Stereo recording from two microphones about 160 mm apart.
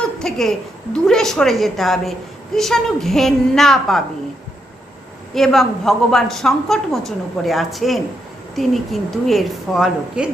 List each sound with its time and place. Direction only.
0.2 s a woman's voice: centre (ahead or behind)
5.3 s a woman's voice: centre (ahead or behind)